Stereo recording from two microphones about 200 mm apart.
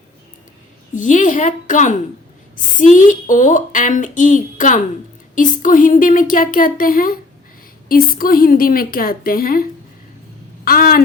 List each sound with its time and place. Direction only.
0.9 s speech: 40° left (ahead or behind)
10.7 s speech: 45° left (ahead or behind)